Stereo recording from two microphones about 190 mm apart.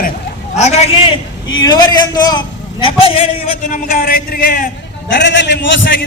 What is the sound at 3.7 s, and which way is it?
A man's voice, 45° left (ahead or behind).